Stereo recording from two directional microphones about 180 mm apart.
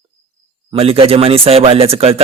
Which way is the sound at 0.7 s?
30° right (ahead or behind).